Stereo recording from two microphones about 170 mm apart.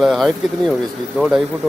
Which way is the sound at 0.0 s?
Centre (ahead or behind).